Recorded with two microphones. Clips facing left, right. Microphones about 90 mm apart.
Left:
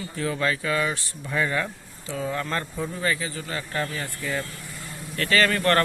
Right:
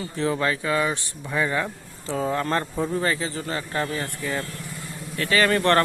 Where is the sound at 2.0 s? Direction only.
35° right (ahead or behind).